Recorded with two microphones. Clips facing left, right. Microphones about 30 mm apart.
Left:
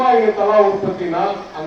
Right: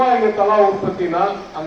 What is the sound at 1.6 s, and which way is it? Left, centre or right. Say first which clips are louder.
Speech: even; left.